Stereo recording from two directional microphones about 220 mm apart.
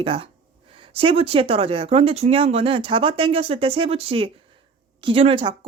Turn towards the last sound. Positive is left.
turn(degrees=-25)  # may be behind; listen again after turning